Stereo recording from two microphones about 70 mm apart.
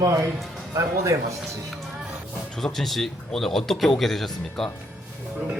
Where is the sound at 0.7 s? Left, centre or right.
Right.